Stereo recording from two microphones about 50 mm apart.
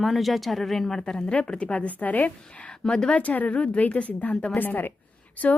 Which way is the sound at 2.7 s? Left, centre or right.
Centre.